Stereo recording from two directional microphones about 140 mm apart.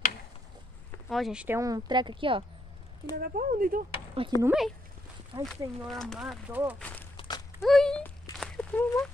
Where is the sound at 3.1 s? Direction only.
90° right.